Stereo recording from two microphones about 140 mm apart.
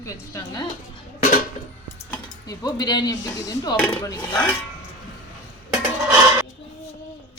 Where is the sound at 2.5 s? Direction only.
30° left (ahead or behind).